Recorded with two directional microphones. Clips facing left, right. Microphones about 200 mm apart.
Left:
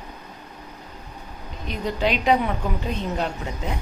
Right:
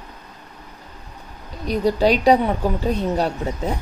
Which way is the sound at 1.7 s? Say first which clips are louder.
Right 7 dB; 35° right (ahead or behind).